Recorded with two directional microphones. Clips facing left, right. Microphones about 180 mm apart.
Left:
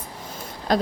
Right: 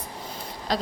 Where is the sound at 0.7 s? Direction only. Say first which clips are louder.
Left 6 dB; 50° left (ahead or behind).